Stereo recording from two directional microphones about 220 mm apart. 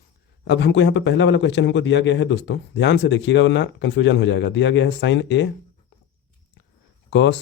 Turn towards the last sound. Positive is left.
turn(degrees=55)  # may be behind; listen again after turning